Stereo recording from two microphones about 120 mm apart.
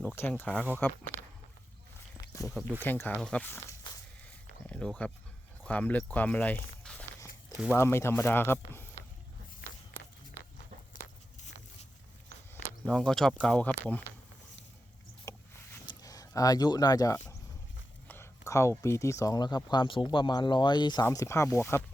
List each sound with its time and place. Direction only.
0.2 s speech: 20° left (ahead or behind)
2.3 s a sound: 25° left (ahead or behind)
2.8 s speech: 15° left (ahead or behind)
3.2 s speech: 5° left (ahead or behind)
3.4 s speech: 15° left (ahead or behind)
4.6 s a sound: 10° left (ahead or behind)
5.6 s speech: 10° left (ahead or behind)
7.7 s speech: 20° left (ahead or behind)
12.8 s speech: 5° left (ahead or behind)
15.2 s vehicle: 25° left (ahead or behind)
15.9 s speech: 30° left (ahead or behind)